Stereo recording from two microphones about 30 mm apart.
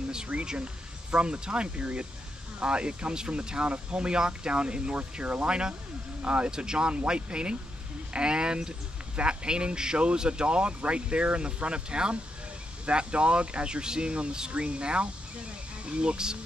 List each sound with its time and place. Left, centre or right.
0.3 s speech: right
5.2 s speech: right
5.5 s speech: right
6.2 s speech: right
6.5 s speech: right